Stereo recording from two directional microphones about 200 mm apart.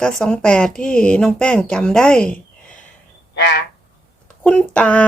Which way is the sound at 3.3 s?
60° left (ahead or behind).